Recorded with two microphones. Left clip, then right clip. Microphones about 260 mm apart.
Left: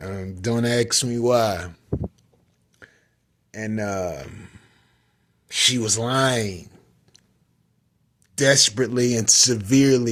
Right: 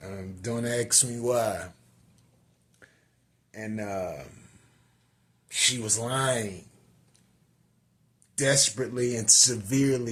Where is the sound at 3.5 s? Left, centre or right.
Left.